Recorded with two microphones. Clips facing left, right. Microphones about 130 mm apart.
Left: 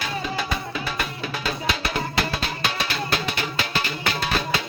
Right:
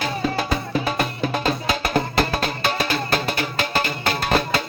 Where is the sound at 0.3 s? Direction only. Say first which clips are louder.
Right 5 dB; 45° right (ahead or behind).